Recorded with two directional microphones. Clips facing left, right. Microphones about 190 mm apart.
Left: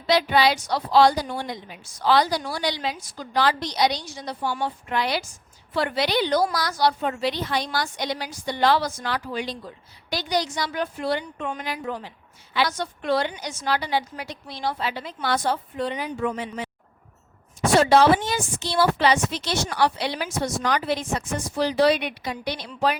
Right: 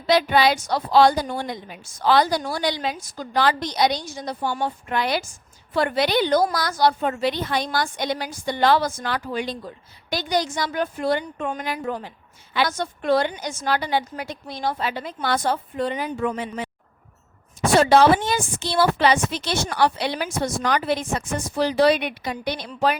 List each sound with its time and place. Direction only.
0.1 s a woman's voice: 50° right (ahead or behind)
17.7 s a woman's voice: 55° right (ahead or behind)